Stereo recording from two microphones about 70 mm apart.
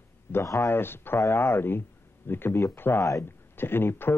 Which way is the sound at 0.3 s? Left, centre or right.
Left.